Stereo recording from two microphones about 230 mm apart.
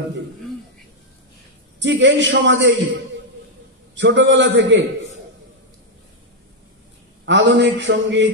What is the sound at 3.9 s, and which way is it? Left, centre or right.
Speech, right.